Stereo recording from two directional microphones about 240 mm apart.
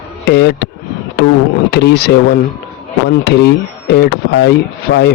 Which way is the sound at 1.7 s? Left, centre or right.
Left.